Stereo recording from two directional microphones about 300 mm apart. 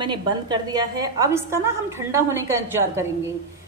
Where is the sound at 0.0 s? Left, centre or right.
Centre.